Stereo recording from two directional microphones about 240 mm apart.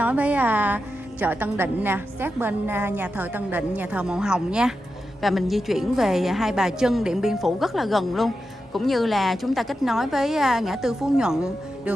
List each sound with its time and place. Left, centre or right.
0.0 s a woman's voice: centre